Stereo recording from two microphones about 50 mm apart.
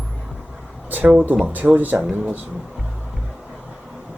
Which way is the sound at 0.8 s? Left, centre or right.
Right.